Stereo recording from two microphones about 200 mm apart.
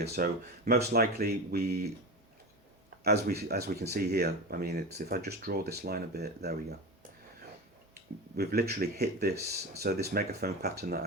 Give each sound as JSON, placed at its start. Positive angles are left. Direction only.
{"t": 0.0, "sound": "speech", "side_deg": -50}
{"t": 3.0, "sound": "speech", "side_deg": -50}
{"t": 8.4, "sound": "speech", "side_deg": -50}